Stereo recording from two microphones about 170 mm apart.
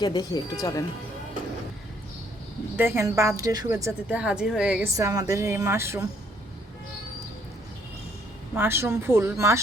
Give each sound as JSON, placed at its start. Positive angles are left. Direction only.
{"t": 0.0, "sound": "speech", "side_deg": 25}
{"t": 2.7, "sound": "speech", "side_deg": -15}
{"t": 4.1, "sound": "a woman's voice", "side_deg": -5}
{"t": 4.9, "sound": "speech", "side_deg": -20}
{"t": 8.5, "sound": "speech", "side_deg": -15}